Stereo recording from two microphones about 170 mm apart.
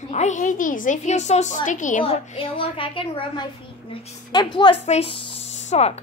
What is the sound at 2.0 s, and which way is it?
A woman's voice, 30° left (ahead or behind).